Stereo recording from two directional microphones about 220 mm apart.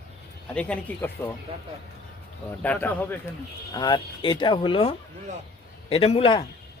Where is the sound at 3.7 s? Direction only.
20° left (ahead or behind).